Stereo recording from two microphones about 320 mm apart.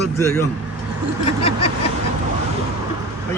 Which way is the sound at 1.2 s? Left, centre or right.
Centre.